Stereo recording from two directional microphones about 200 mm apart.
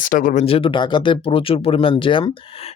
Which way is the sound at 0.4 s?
25° left (ahead or behind).